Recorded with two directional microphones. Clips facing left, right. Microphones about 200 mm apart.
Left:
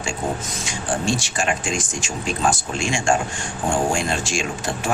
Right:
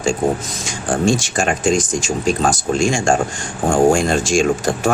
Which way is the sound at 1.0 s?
45° right (ahead or behind).